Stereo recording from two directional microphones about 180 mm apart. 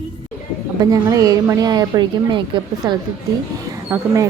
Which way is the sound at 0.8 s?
20° right (ahead or behind).